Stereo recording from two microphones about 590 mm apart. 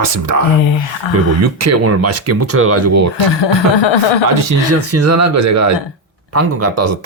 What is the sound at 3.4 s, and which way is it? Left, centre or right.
Speech, left.